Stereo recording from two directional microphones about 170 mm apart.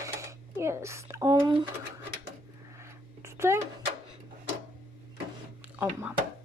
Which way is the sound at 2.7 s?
15° right (ahead or behind).